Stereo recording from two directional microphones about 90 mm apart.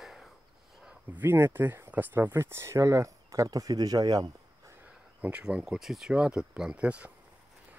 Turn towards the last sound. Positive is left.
turn(degrees=-15)  # may be behind; listen again after turning